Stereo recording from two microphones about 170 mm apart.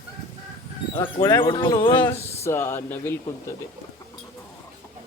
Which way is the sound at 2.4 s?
15° left (ahead or behind).